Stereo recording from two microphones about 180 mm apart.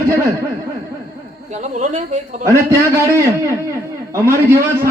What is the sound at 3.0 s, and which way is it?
A man's voice, 15° right (ahead or behind).